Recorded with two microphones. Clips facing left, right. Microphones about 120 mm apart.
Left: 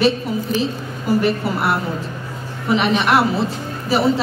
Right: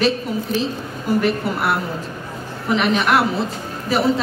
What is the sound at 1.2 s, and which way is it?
A woman's voice, centre (ahead or behind).